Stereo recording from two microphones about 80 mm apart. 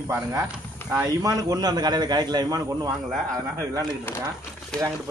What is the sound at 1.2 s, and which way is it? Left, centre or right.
Speech, right.